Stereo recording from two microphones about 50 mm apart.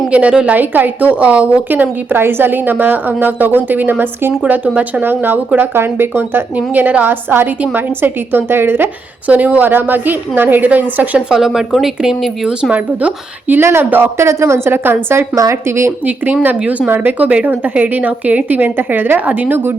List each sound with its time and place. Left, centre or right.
0.1 s speech: right
0.5 s a woman's voice: right
1.7 s a woman's voice: right
6.7 s a woman's voice: right
9.2 s a woman's voice: right
11.3 s speech: centre
12.7 s speech: right
13.6 s speech: right
14.3 s a woman's voice: right
14.7 s a woman's voice: right
15.4 s speech: right
16.0 s a woman's voice: right